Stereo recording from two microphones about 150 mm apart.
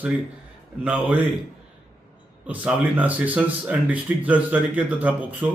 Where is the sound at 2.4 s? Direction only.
10° right (ahead or behind).